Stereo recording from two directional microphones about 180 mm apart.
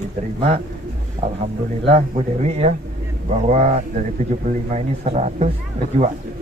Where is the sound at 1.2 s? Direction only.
40° right (ahead or behind).